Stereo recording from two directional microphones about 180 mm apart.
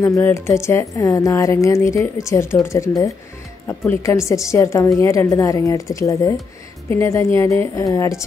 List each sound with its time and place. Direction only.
0.0 s a woman's voice: 15° left (ahead or behind)